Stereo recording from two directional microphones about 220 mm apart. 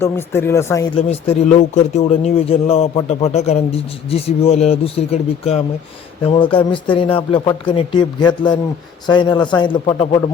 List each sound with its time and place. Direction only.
0.0 s speech: 10° left (ahead or behind)
0.9 s speech: 30° left (ahead or behind)